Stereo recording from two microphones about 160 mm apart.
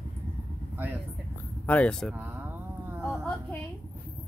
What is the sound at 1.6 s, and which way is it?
Speech, 10° left (ahead or behind).